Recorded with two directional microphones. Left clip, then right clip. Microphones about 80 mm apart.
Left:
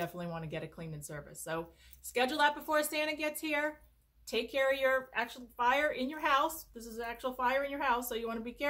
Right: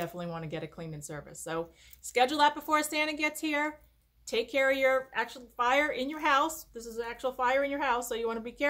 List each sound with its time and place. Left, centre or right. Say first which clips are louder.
0.0 s a woman's voice: right 2 dB; right